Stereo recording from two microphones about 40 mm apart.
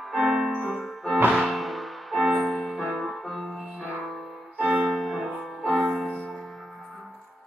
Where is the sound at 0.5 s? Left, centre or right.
Centre.